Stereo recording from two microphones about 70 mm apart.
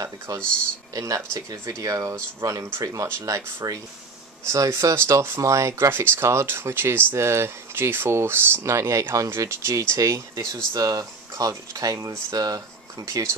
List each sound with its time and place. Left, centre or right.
0.3 s speech: right
3.1 s speech: right